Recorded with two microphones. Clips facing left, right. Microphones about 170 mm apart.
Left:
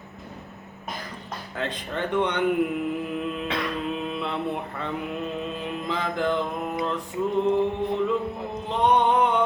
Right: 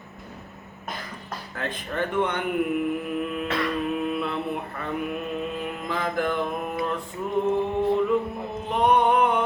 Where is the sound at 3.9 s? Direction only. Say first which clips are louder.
Right 3 dB; 20° left (ahead or behind).